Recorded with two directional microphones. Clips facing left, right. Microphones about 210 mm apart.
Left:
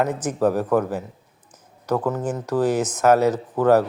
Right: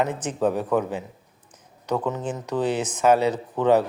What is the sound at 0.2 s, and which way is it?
Speech, 10° left (ahead or behind).